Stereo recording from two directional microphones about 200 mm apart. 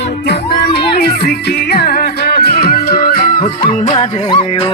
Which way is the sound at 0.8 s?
55° left (ahead or behind).